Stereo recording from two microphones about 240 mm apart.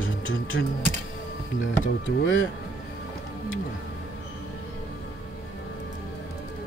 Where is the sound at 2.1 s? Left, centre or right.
Left.